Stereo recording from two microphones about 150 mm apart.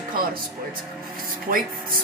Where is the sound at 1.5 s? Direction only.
70° right (ahead or behind).